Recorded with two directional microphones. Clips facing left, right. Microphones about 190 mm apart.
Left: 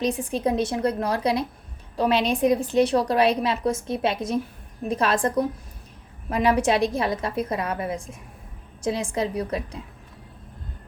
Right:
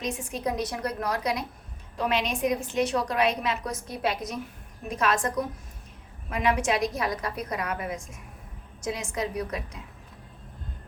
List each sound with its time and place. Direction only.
0.0 s a woman's voice: 35° left (ahead or behind)